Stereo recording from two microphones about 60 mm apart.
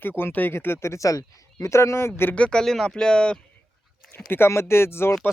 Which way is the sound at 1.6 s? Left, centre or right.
Left.